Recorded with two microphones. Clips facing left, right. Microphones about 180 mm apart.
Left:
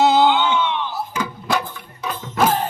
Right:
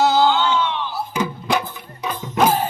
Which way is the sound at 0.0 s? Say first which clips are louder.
Left 1 dB; 20° left (ahead or behind).